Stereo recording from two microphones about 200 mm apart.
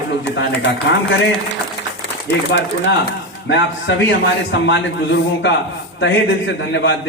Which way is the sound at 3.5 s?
65° left (ahead or behind).